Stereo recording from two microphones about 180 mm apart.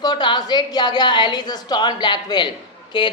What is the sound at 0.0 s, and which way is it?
Speech, 25° left (ahead or behind).